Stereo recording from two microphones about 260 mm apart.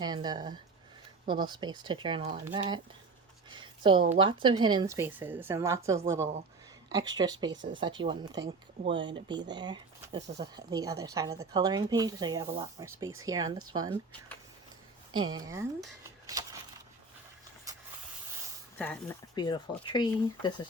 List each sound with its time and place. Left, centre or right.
0.0 s a woman's voice: centre
3.5 s a sound: centre
4.0 s a woman's voice: right
15.1 s a woman's voice: centre
16.2 s a sound: centre
18.8 s speech: centre